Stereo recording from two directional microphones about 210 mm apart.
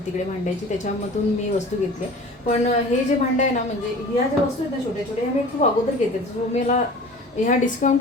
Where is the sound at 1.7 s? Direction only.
35° left (ahead or behind).